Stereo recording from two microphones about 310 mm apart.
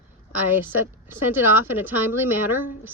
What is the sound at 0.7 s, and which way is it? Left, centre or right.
Speech, centre.